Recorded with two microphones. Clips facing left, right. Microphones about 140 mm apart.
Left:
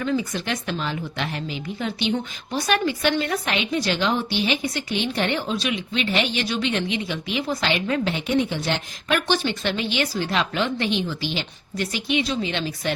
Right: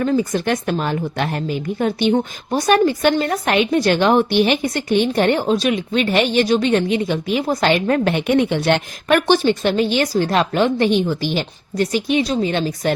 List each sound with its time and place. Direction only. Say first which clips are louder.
0.0 s a woman's voice: right 7 dB; 45° right (ahead or behind)